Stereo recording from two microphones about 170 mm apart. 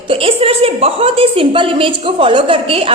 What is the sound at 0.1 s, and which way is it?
A woman's voice, 35° right (ahead or behind).